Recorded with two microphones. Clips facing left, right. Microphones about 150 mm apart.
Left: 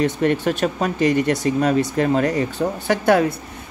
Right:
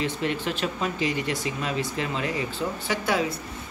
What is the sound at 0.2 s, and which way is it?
Speech, 50° left (ahead or behind).